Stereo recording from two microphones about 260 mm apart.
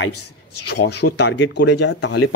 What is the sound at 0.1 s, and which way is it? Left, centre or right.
Speech, left.